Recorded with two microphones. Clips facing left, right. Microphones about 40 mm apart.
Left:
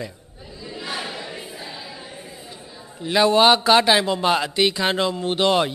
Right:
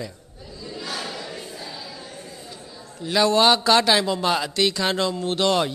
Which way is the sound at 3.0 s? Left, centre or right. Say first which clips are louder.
Left 2 dB; left.